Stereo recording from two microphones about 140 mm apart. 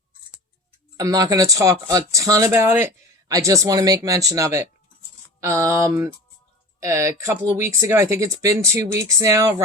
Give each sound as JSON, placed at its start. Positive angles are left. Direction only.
{"t": 0.9, "sound": "speech", "side_deg": -25}